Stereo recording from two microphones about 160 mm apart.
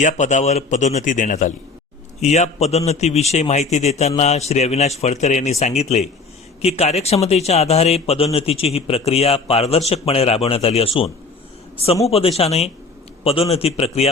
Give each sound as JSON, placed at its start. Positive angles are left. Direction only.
{"t": 0.0, "sound": "a man's voice", "side_deg": 50}
{"t": 12.4, "sound": "a man's voice", "side_deg": 40}